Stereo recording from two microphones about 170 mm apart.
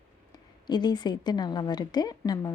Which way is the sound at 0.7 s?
25° left (ahead or behind).